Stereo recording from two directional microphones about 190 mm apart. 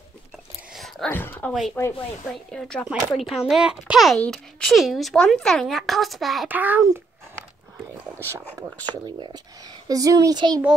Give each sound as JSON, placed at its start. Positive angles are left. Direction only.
{"t": 0.7, "sound": "a sound", "side_deg": 0}
{"t": 1.8, "sound": "speech", "side_deg": 10}
{"t": 8.9, "sound": "a child's voice", "side_deg": -20}